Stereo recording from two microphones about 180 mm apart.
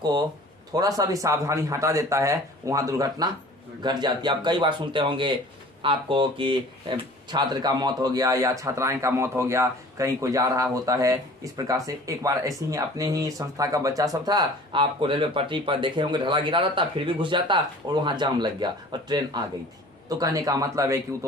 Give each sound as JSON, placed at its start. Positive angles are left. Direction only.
{"t": 0.0, "sound": "speech", "side_deg": -25}